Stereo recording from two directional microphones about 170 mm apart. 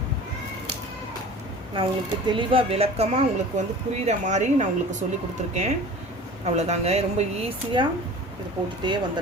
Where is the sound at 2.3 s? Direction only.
30° right (ahead or behind).